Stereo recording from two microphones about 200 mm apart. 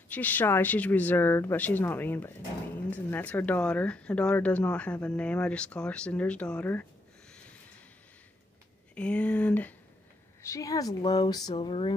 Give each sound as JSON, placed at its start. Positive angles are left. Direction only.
{"t": 0.1, "sound": "speech", "side_deg": 10}
{"t": 8.9, "sound": "speech", "side_deg": 5}